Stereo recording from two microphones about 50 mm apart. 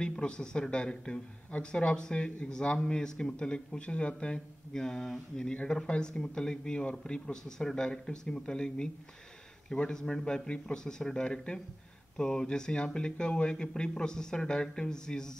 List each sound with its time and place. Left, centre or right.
0.0 s speech: centre
7.4 s speech: centre